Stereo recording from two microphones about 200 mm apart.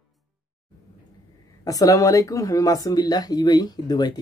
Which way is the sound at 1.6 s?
15° left (ahead or behind).